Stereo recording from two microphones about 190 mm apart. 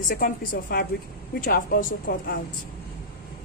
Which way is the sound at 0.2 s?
45° left (ahead or behind).